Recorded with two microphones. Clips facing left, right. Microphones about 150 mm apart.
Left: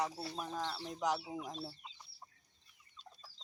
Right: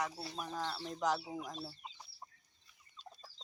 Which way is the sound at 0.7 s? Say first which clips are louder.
Right 2 dB; 10° left (ahead or behind).